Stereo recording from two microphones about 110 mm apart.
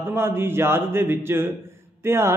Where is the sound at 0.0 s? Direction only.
20° right (ahead or behind).